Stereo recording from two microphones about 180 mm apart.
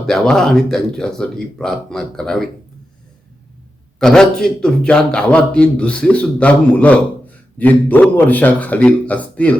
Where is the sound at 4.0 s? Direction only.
5° left (ahead or behind).